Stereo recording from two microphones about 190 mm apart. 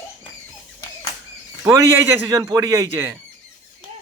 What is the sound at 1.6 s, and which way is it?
Speech, 10° right (ahead or behind).